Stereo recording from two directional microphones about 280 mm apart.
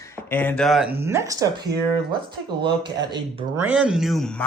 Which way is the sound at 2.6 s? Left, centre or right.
Centre.